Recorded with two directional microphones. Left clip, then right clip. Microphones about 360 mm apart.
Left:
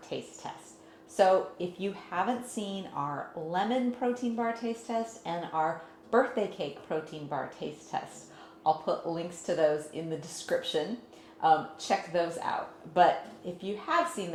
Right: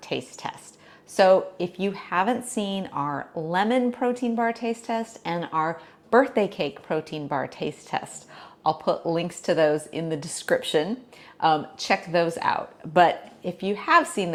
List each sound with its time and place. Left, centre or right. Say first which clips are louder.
0.1 s a woman's voice: right 8 dB; right